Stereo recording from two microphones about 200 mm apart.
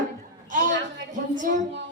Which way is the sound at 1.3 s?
40° right (ahead or behind).